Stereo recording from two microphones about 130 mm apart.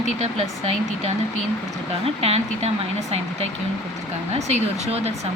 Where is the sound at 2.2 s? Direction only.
55° right (ahead or behind).